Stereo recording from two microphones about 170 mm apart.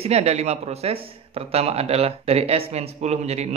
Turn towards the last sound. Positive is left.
turn(degrees=-40)  # may be behind; listen again after turning